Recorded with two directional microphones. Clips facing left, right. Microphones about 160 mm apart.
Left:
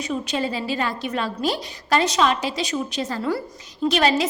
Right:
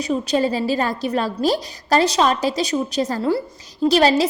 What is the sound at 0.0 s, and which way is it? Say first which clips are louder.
A woman's voice: right 6 dB; 40° right (ahead or behind).